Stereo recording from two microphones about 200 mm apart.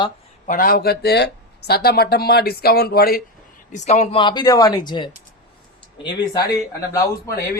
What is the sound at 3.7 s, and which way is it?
Speech, 35° left (ahead or behind).